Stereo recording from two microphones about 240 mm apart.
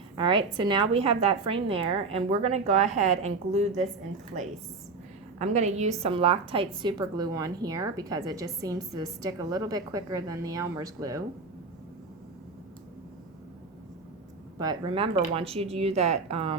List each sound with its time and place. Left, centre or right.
0.2 s a woman's voice: centre
5.4 s a woman's voice: right
14.6 s a woman's voice: centre